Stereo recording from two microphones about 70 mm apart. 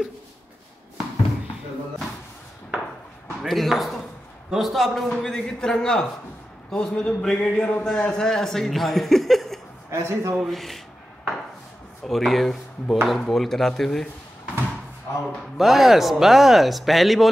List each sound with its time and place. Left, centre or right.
3.4 s a man's voice: centre
9.8 s a man's voice: right
10.3 s a man's voice: centre
12.0 s a man's voice: centre
15.1 s a man's voice: left
15.5 s a man's voice: centre